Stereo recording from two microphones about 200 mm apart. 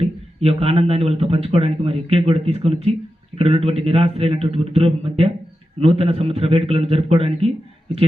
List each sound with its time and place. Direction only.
0.0 s speech: 30° right (ahead or behind)